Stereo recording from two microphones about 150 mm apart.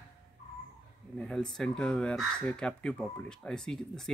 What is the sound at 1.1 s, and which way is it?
Speech, 5° left (ahead or behind).